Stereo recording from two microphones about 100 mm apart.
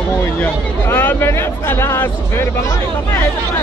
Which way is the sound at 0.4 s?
20° left (ahead or behind).